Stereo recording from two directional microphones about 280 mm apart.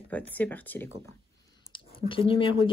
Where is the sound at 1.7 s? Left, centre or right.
Centre.